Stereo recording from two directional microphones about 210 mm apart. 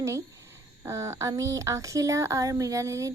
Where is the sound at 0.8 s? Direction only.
15° right (ahead or behind).